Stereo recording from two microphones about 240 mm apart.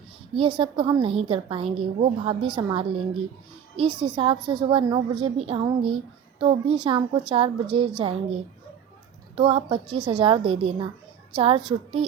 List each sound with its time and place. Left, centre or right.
0.3 s a woman's voice: right
9.3 s a woman's voice: right